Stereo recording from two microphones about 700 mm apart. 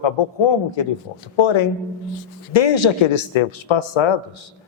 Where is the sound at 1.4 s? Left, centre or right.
Left.